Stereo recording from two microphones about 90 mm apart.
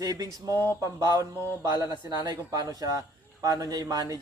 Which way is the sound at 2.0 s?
50° right (ahead or behind).